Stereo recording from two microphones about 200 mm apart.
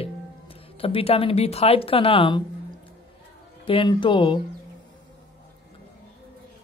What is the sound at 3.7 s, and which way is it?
Speech, 25° left (ahead or behind).